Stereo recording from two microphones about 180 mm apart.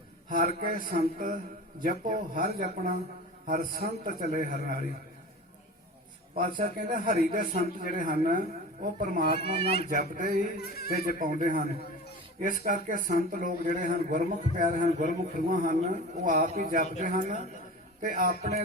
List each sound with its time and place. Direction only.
0.3 s a man's voice: 50° right (ahead or behind)
6.3 s a man's voice: 50° right (ahead or behind)
9.4 s speech: 60° left (ahead or behind)
9.9 s a man's voice: 55° right (ahead or behind)